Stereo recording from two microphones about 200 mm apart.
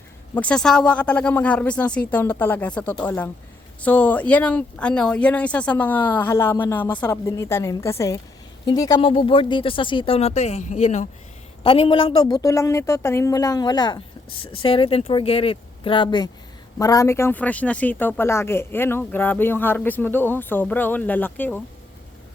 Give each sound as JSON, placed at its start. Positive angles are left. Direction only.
{"t": 0.3, "sound": "a woman's voice", "side_deg": 5}